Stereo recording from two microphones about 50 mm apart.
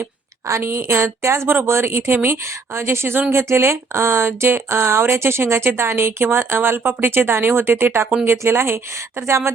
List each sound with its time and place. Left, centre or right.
0.4 s speech: right